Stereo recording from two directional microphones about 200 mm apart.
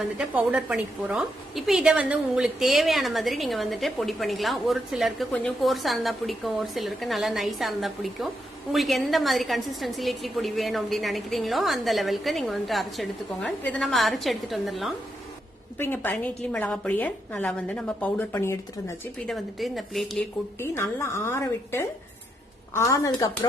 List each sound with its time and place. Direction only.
0.2 s a woman's voice: 5° right (ahead or behind)
15.8 s a woman's voice: 10° left (ahead or behind)
19.3 s a woman's voice: centre (ahead or behind)
20.6 s a woman's voice: 10° left (ahead or behind)